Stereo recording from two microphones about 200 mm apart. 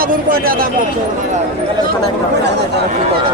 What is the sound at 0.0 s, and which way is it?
Speech, 45° right (ahead or behind).